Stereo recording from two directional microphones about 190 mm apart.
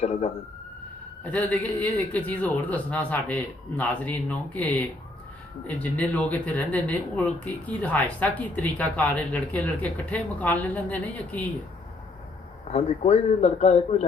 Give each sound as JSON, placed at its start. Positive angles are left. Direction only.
{"t": 0.0, "sound": "speech", "side_deg": 35}
{"t": 1.2, "sound": "speech", "side_deg": 5}
{"t": 12.7, "sound": "speech", "side_deg": 35}